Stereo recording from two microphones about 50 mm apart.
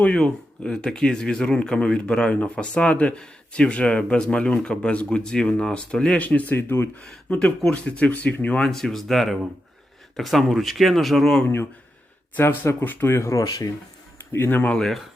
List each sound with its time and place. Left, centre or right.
0.6 s speech: centre; by 6.7 s left
7.3 s speech: left
8.6 s speech: centre
11.4 s speech: left
12.8 s speech: left
14.3 s speech: left